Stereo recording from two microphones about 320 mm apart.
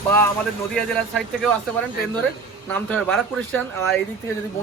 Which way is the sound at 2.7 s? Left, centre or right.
Centre.